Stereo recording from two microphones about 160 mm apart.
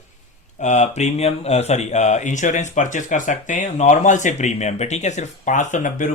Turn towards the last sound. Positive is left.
turn(degrees=55)  # may be behind; listen again after turning